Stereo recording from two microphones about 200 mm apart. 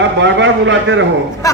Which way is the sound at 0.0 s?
65° right (ahead or behind).